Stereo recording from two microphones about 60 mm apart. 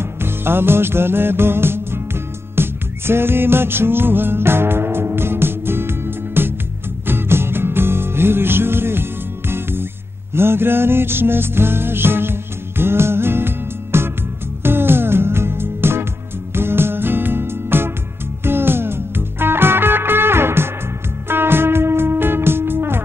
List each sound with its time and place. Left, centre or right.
0.0 s music: right